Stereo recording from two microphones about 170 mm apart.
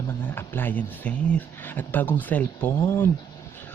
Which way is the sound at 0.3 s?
10° left (ahead or behind).